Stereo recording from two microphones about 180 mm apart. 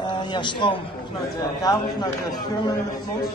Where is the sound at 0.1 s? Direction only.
25° left (ahead or behind).